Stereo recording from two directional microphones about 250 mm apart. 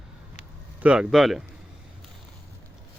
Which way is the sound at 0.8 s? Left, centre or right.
Centre.